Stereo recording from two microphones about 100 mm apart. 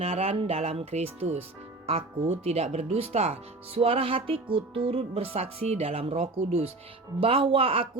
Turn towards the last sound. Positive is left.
turn(degrees=-65)  # may be behind; listen again after turning